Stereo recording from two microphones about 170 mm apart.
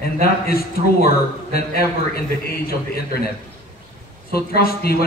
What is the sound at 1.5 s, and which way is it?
A man's voice, 65° left (ahead or behind).